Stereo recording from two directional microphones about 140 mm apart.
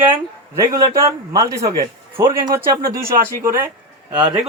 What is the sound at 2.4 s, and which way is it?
Speech, 85° right.